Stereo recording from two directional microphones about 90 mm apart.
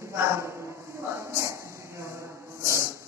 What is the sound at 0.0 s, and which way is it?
Speech, 30° right (ahead or behind).